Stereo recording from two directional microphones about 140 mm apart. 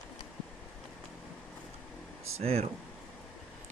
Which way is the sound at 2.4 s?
45° right (ahead or behind).